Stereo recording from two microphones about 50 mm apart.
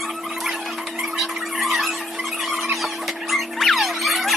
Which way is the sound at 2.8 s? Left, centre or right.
Centre.